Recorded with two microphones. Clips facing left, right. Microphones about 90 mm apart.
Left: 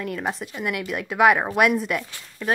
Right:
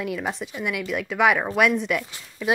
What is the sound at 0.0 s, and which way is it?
A woman's voice, centre (ahead or behind).